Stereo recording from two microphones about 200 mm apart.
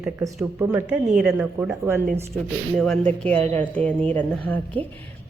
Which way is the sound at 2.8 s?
5° left (ahead or behind).